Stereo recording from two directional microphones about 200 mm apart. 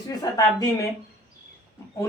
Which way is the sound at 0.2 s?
15° left (ahead or behind).